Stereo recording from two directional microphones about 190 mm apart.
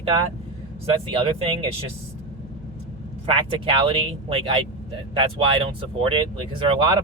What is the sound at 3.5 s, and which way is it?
Speech, 30° right (ahead or behind).